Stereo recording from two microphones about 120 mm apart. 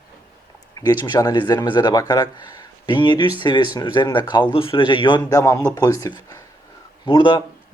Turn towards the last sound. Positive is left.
turn(degrees=40)  # may be behind; listen again after turning